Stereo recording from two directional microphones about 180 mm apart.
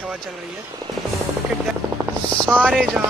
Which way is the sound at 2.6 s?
5° right (ahead or behind).